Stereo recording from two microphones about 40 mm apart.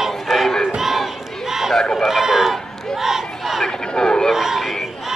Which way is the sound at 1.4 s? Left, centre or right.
Centre.